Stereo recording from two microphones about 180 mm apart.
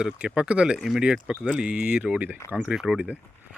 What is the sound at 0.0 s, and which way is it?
Speech, 5° right (ahead or behind).